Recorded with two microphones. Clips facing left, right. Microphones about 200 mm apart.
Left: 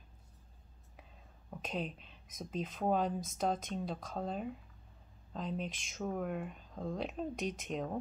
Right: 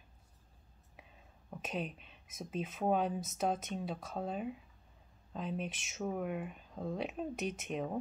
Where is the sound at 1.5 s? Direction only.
5° right (ahead or behind).